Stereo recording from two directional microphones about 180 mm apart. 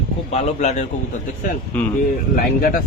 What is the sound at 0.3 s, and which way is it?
Speech, 40° left (ahead or behind).